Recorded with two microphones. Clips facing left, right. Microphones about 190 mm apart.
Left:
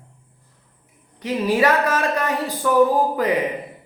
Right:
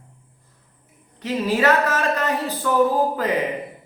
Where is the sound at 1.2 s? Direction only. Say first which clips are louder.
Left 2 dB; 15° left (ahead or behind).